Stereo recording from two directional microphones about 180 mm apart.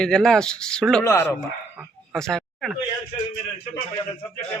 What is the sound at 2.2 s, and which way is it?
Speech, 5° left (ahead or behind).